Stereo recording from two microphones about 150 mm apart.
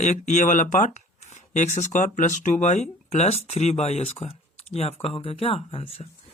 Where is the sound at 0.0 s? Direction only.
55° left (ahead or behind).